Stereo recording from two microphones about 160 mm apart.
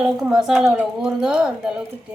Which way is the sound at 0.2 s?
Centre (ahead or behind).